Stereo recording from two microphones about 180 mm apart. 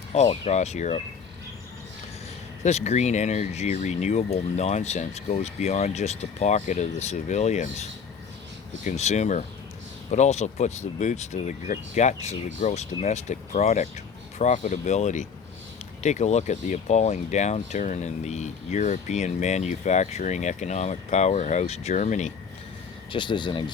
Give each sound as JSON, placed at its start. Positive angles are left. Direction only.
{"t": 0.1, "sound": "speech", "side_deg": 35}
{"t": 2.6, "sound": "speech", "side_deg": 40}
{"t": 23.1, "sound": "speech", "side_deg": 25}